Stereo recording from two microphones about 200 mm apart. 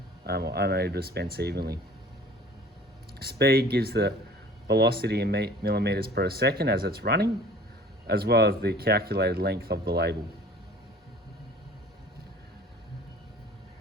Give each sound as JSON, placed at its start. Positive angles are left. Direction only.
{"t": 0.3, "sound": "speech", "side_deg": -50}
{"t": 3.2, "sound": "speech", "side_deg": -50}